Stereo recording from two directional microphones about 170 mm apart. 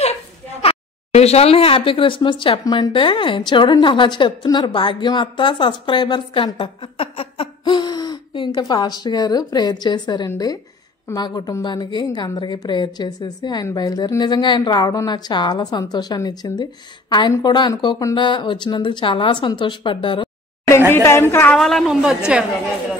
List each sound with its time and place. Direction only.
0.6 s a woman's voice: 35° left (ahead or behind)
20.9 s a woman's voice: 15° left (ahead or behind)
21.5 s a woman's voice: centre (ahead or behind)